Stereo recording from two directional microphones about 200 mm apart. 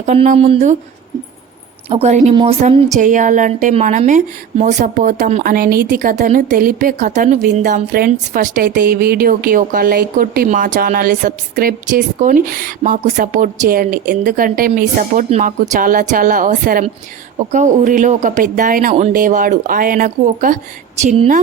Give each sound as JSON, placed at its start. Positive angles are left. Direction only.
{"t": 0.0, "sound": "a woman's voice", "side_deg": -35}
{"t": 1.9, "sound": "a woman's voice", "side_deg": -35}